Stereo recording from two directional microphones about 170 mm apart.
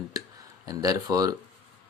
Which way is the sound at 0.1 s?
20° right (ahead or behind).